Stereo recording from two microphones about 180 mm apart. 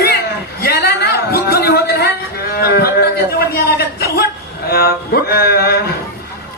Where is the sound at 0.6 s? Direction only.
60° left (ahead or behind).